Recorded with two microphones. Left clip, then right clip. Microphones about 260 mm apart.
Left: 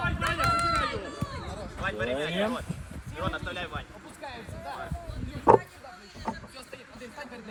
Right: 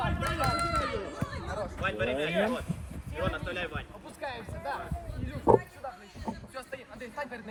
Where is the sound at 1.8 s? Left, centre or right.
Centre.